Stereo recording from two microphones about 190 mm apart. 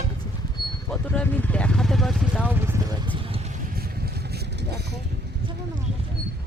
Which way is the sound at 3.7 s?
55° right (ahead or behind).